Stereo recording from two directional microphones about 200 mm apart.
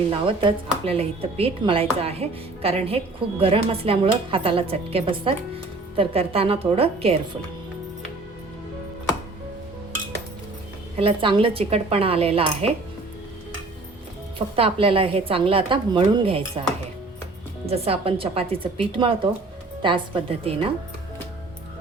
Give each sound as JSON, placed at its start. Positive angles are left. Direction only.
{"t": 0.1, "sound": "speech", "side_deg": -25}
{"t": 10.9, "sound": "speech", "side_deg": -25}
{"t": 14.3, "sound": "speech", "side_deg": -30}
{"t": 17.7, "sound": "speech", "side_deg": -30}